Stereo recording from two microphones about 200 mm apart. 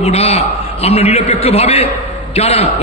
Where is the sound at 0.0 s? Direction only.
30° left (ahead or behind).